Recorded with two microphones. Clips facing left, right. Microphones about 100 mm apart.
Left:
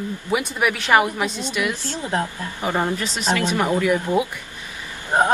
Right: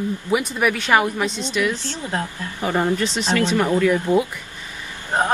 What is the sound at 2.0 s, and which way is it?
Speech, 20° left (ahead or behind).